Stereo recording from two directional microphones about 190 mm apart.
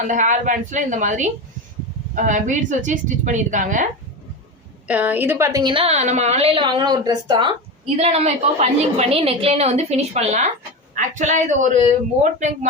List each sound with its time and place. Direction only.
0.0 s a woman's voice: 40° right (ahead or behind)
4.9 s a woman's voice: 10° right (ahead or behind)
7.9 s a woman's voice: 35° right (ahead or behind)